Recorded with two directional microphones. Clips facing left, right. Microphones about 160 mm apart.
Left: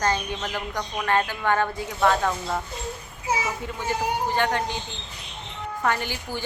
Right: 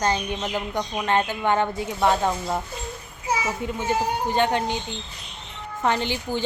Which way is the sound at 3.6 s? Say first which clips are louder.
Right 3 dB; 20° right (ahead or behind).